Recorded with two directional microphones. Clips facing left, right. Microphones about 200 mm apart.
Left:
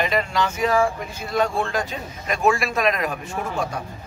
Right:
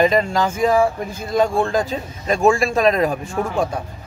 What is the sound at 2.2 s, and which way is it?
Speech, 30° right (ahead or behind).